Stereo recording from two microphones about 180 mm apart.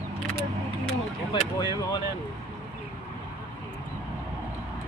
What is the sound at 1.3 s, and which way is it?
Speech, 25° left (ahead or behind).